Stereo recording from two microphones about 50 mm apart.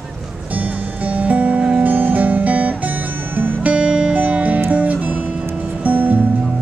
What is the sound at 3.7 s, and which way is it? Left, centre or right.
Music, right.